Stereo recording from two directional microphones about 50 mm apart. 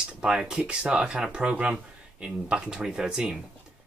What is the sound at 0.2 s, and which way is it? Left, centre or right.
Speech, centre.